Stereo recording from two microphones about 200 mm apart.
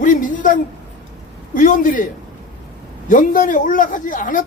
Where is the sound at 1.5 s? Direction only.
40° left (ahead or behind).